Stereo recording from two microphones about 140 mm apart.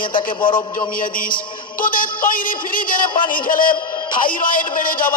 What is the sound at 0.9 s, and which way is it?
Music, 85° left.